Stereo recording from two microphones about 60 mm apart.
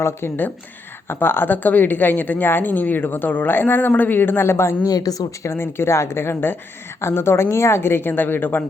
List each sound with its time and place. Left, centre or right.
1.0 s a woman's voice: left
4.8 s speech: left
5.5 s a woman's voice: left